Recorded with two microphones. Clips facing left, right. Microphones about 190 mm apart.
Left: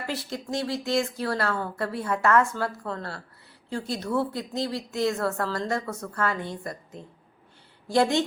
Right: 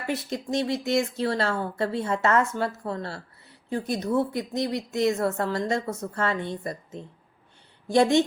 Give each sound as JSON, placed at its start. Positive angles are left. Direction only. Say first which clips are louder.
{"t": 0.3, "sound": "a woman's voice", "louder": "right 3 dB", "side_deg": -20}